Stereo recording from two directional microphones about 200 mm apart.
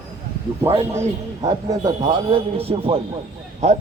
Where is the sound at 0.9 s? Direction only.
15° right (ahead or behind).